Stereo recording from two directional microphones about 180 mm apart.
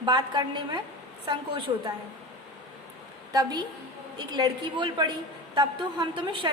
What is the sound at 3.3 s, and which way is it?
A woman's voice, 20° right (ahead or behind).